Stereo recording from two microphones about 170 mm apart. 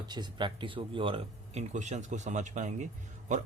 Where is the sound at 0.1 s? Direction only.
25° right (ahead or behind).